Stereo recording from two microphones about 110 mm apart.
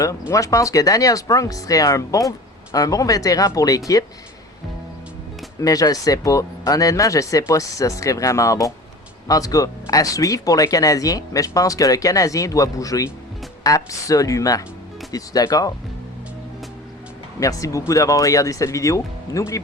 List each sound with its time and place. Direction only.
0.0 s speech: 30° left (ahead or behind)
5.5 s speech: 30° left (ahead or behind)
17.4 s speech: 30° left (ahead or behind)